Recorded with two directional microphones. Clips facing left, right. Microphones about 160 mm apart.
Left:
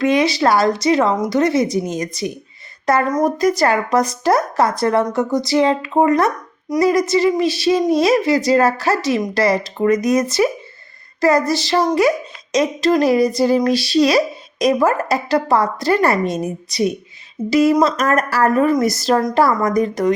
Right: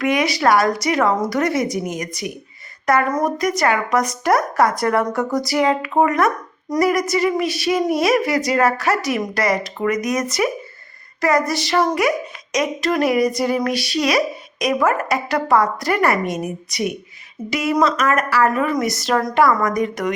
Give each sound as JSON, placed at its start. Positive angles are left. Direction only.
{"t": 0.0, "sound": "a woman's voice", "side_deg": 25}